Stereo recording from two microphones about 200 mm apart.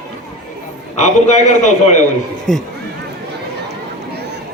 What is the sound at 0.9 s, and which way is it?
A man's voice, 35° left (ahead or behind).